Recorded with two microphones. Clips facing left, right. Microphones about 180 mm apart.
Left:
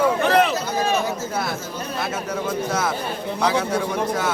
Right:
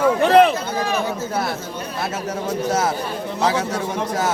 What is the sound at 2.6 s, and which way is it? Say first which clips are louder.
Speech: right 6 dB; 35° right (ahead or behind).